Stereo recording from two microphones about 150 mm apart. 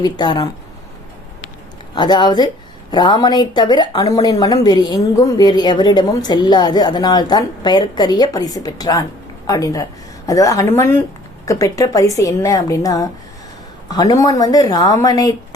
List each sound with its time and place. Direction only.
0.0 s speech: 25° left (ahead or behind)
2.0 s speech: 30° left (ahead or behind)